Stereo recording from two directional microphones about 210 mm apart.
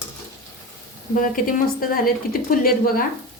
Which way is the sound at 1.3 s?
40° left (ahead or behind).